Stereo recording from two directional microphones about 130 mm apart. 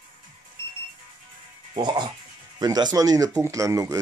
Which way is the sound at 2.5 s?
30° right (ahead or behind).